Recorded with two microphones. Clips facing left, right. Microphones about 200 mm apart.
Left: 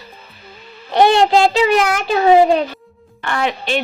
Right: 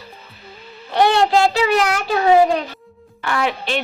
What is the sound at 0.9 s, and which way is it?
A child's voice, 15° left (ahead or behind).